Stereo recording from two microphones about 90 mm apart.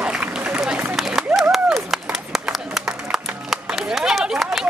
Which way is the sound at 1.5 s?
5° right (ahead or behind).